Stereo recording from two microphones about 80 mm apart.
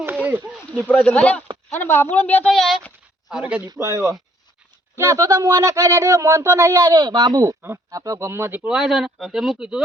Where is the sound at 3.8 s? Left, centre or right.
Right.